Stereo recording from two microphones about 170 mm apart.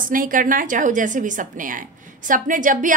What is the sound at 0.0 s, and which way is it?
A woman's voice, 55° right (ahead or behind).